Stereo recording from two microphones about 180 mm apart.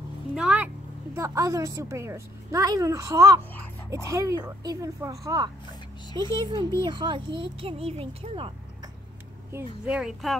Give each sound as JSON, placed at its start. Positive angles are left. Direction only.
{"t": 0.3, "sound": "speech", "side_deg": -5}
{"t": 1.1, "sound": "a woman's voice", "side_deg": -15}
{"t": 9.8, "sound": "speech", "side_deg": -5}